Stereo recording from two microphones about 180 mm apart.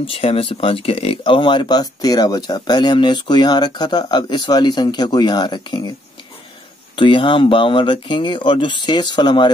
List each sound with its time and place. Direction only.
0.0 s speech: 30° left (ahead or behind)
7.0 s speech: 25° left (ahead or behind)